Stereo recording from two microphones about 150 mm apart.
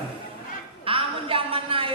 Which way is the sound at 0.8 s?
35° right (ahead or behind).